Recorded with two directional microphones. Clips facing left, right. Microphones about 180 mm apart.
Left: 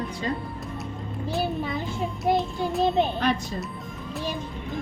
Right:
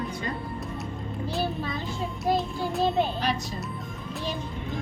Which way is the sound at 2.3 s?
20° left (ahead or behind).